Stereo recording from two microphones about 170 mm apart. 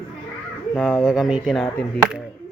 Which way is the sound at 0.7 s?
5° left (ahead or behind).